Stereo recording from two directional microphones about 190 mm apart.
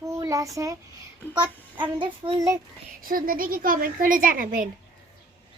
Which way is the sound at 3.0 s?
50° right (ahead or behind).